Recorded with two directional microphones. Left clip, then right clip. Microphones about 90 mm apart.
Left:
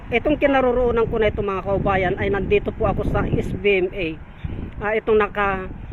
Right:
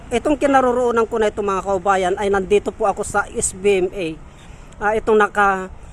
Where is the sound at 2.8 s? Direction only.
25° right (ahead or behind).